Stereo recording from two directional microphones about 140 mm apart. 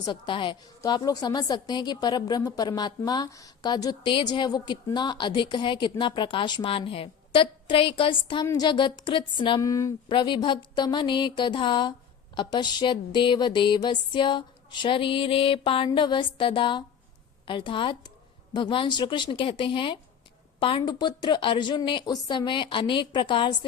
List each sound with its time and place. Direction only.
0.0 s a woman's voice: 35° left (ahead or behind)
9.6 s speech: 20° left (ahead or behind)
10.1 s a woman's voice: 35° left (ahead or behind)